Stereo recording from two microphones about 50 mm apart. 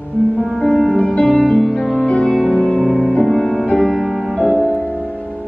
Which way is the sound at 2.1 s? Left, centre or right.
Centre.